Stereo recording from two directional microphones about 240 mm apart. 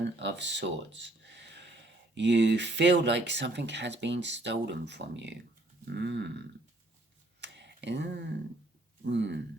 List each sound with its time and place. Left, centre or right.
0.2 s speech: right
7.4 s tick: right
9.0 s speech: right